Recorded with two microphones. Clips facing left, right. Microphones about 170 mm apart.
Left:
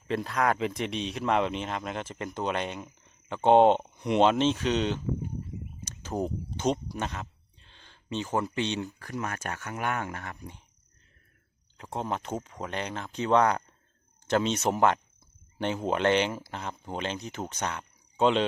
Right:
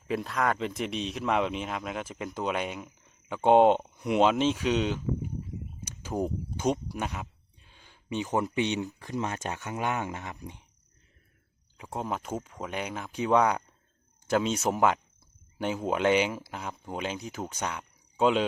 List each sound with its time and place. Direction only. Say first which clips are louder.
0.1 s speech: left 1 dB; centre (ahead or behind)
5.8 s a sound: right 1 dB; 10° right (ahead or behind)
8.5 s speech: right 2 dB; 15° right (ahead or behind)
11.8 s speech: left 1 dB; 5° right (ahead or behind)